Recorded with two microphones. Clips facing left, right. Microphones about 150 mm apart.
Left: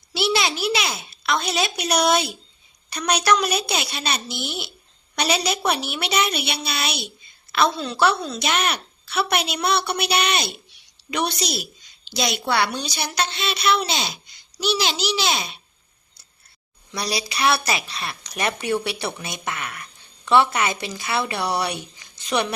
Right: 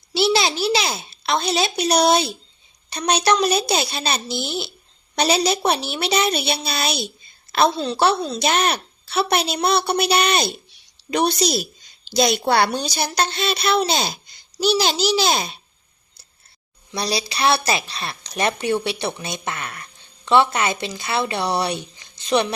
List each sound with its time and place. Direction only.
0.1 s a woman's voice: 30° right (ahead or behind)
16.9 s a woman's voice: 30° right (ahead or behind)